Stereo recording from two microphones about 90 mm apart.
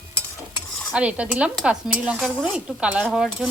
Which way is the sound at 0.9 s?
10° right (ahead or behind).